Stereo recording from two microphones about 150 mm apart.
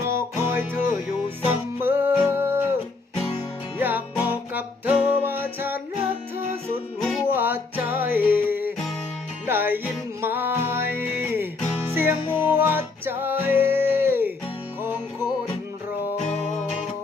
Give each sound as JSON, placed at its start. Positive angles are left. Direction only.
{"t": 0.0, "sound": "music", "side_deg": -20}
{"t": 3.8, "sound": "music", "side_deg": -10}